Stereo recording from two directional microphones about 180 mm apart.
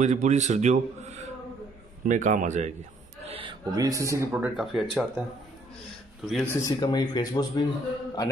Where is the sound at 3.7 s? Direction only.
20° right (ahead or behind); by 4.8 s centre (ahead or behind).